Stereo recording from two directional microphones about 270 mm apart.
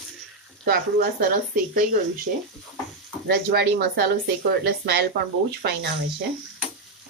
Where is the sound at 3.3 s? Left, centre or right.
Right.